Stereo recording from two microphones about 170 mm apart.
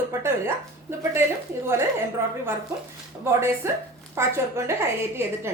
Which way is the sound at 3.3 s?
15° right (ahead or behind).